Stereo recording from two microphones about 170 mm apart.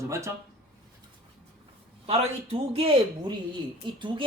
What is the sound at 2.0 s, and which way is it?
A woman's voice, 35° right (ahead or behind).